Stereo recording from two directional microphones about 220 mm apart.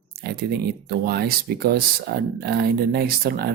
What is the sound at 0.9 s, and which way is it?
Speech, 45° right (ahead or behind).